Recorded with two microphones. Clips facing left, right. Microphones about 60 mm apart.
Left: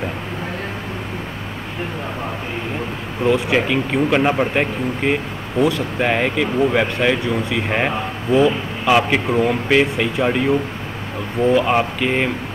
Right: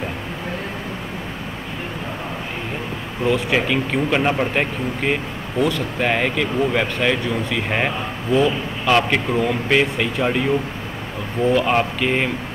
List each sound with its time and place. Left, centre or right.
3.3 s speech: centre